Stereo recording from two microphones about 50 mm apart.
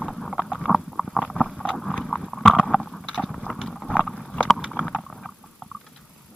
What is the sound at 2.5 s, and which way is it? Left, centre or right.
Vehicle, centre.